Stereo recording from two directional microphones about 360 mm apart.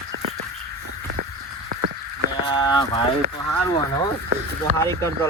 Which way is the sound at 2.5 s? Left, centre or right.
Centre.